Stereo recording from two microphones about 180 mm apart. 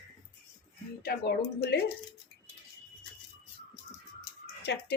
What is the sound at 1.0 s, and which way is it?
Speech, 60° left (ahead or behind).